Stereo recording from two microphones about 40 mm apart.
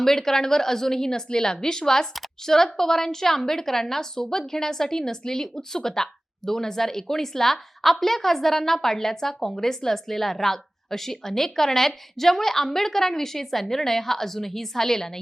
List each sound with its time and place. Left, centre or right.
0.0 s a woman's voice: centre